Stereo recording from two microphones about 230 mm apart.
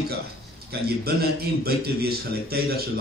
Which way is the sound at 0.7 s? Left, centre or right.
Right.